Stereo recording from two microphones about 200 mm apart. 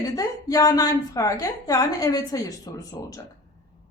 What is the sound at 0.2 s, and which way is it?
A woman's voice, 15° left (ahead or behind).